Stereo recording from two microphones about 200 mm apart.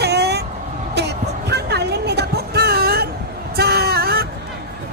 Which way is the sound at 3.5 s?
50° right (ahead or behind).